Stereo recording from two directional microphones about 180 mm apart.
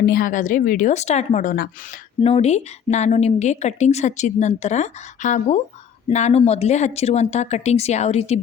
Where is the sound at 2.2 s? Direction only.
35° left (ahead or behind).